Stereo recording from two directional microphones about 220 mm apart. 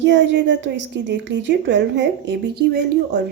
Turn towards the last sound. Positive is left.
turn(degrees=-50)  # may be behind; listen again after turning